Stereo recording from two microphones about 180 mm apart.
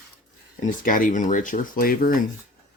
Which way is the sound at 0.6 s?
50° left (ahead or behind).